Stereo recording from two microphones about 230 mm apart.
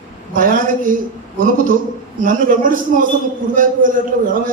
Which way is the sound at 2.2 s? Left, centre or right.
Right.